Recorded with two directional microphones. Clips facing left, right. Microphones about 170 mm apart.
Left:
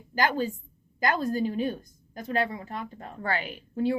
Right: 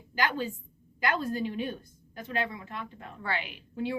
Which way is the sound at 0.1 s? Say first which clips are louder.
Left 4 dB; 40° left (ahead or behind).